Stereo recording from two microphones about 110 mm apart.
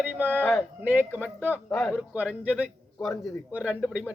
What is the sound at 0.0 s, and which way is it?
Speech, 15° right (ahead or behind).